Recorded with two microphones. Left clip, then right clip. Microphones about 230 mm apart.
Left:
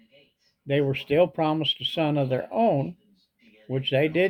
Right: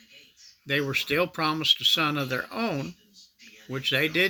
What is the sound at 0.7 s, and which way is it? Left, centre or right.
Speech, centre.